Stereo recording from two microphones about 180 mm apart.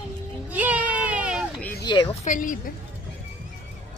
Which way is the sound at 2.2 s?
45° left (ahead or behind).